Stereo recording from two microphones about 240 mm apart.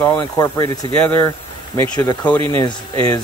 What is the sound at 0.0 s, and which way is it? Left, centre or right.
Speech, centre.